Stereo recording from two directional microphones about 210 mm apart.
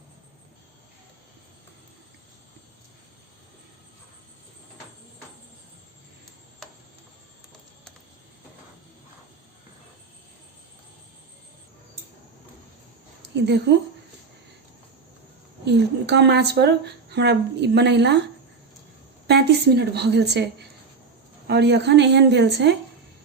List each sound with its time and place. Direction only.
13.2 s a woman's voice: 55° right (ahead or behind)
15.6 s speech: 55° right (ahead or behind)
19.3 s speech: 50° right (ahead or behind)